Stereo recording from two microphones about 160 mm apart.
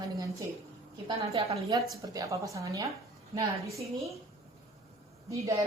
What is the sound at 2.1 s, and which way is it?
Speech, 20° right (ahead or behind).